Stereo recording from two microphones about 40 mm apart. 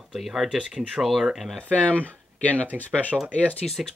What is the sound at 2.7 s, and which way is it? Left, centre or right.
Speech, left.